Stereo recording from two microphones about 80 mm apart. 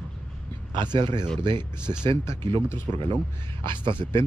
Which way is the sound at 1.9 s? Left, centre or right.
Right.